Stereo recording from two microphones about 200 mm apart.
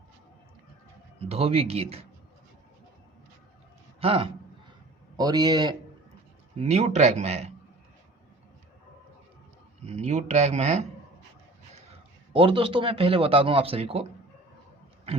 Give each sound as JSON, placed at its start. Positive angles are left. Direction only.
{"t": 1.2, "sound": "speech", "side_deg": -30}
{"t": 4.0, "sound": "a man's voice", "side_deg": -30}
{"t": 6.6, "sound": "speech", "side_deg": -35}
{"t": 9.8, "sound": "speech", "side_deg": -35}
{"t": 11.9, "sound": "a man's voice", "side_deg": -25}